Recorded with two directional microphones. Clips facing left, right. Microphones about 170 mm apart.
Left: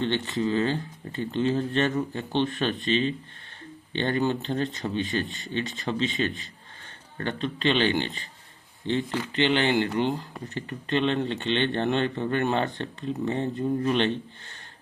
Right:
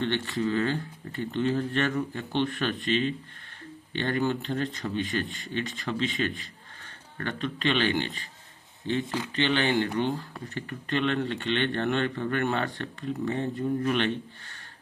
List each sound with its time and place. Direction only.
0.0 s speech: 20° left (ahead or behind)
3.9 s speech: 25° left (ahead or behind)
9.6 s speech: 30° left (ahead or behind)